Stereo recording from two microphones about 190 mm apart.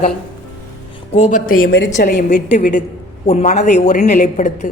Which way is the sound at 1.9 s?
40° left (ahead or behind).